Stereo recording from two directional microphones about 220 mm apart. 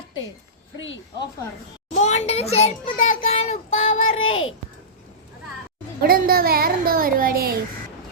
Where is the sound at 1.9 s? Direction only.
30° left (ahead or behind).